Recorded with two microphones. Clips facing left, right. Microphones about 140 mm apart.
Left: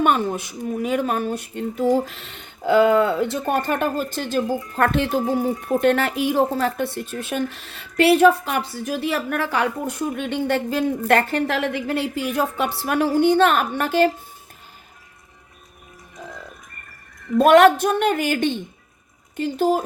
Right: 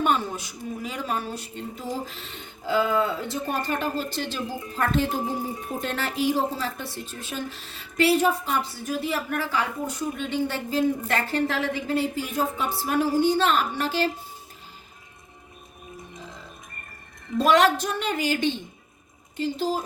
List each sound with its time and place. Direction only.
0.0 s speech: 60° left (ahead or behind)
4.8 s speech: 70° left (ahead or behind)
17.3 s speech: 55° left (ahead or behind)